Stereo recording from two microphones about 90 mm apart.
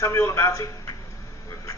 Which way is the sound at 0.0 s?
35° left (ahead or behind).